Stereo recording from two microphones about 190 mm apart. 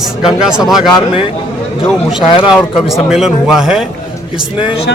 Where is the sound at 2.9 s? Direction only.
Centre (ahead or behind).